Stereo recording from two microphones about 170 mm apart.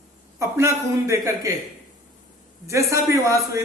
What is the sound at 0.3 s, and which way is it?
A man's voice, 15° right (ahead or behind).